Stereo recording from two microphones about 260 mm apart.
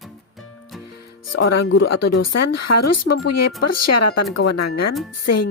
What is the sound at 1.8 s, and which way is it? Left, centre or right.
Speech, left.